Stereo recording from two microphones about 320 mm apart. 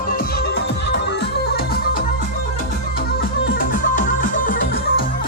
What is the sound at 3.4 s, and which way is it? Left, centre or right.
Music, left.